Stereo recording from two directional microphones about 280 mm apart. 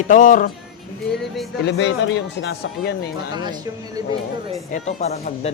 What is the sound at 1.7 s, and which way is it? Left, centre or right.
Speech, left.